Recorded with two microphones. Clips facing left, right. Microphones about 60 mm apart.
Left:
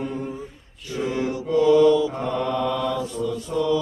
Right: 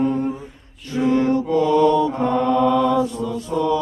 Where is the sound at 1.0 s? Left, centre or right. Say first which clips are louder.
Right 8 dB; centre.